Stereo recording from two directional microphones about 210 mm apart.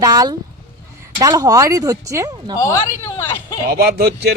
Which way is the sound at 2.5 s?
15° left (ahead or behind).